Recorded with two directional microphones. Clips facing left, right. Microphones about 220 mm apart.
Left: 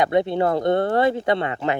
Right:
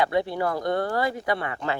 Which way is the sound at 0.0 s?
20° left (ahead or behind).